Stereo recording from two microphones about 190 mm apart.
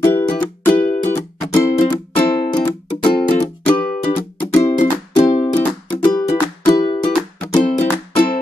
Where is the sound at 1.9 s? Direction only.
20° left (ahead or behind).